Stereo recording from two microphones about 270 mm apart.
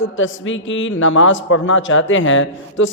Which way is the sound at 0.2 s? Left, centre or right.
Left.